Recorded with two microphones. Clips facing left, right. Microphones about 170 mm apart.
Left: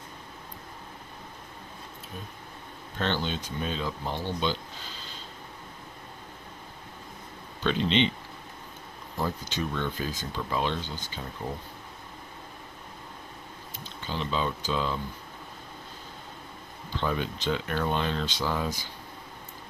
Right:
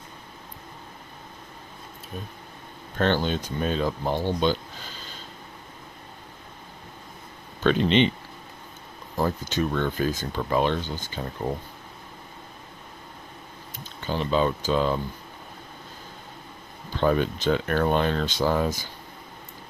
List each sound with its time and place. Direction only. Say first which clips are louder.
3.0 s speech: right 6 dB; 45° right (ahead or behind)
7.6 s speech: right 5 dB; 55° right (ahead or behind)
9.1 s speech: right 6 dB; 45° right (ahead or behind)
14.1 s speech: right 7 dB; 50° right (ahead or behind)
17.0 s speech: right 8 dB; 50° right (ahead or behind)